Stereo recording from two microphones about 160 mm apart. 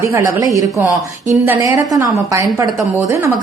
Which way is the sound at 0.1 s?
20° right (ahead or behind).